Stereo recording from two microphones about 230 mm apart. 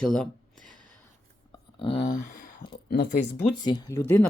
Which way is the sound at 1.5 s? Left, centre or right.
Left.